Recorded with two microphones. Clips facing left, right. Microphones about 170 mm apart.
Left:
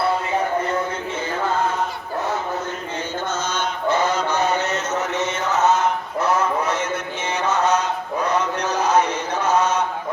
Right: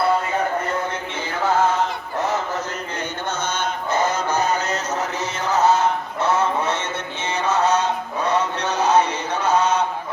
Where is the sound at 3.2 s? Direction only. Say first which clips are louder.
Right 1 dB; 60° right (ahead or behind).